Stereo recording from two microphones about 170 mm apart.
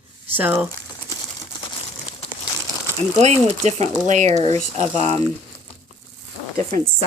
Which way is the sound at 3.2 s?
40° right (ahead or behind).